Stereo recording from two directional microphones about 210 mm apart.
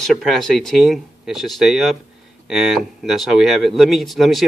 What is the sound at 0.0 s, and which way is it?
Speech, centre (ahead or behind).